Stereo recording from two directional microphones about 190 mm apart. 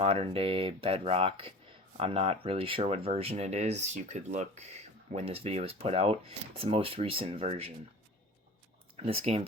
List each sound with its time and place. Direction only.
0.0 s speech: 30° right (ahead or behind)
9.0 s speech: 30° right (ahead or behind)